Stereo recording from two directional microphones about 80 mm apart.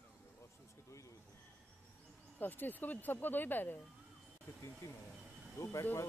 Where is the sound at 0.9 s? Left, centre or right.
Left.